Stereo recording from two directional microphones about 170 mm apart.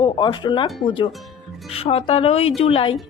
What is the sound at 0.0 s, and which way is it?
A woman's voice, 25° left (ahead or behind).